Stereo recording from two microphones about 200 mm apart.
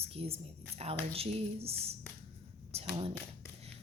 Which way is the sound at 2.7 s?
30° right (ahead or behind).